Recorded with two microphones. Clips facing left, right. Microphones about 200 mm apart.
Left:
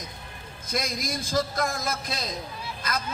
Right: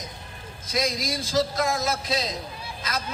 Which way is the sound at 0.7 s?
50° left (ahead or behind).